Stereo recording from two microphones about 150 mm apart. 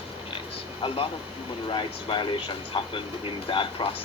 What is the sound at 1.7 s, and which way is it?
Speech, 35° left (ahead or behind).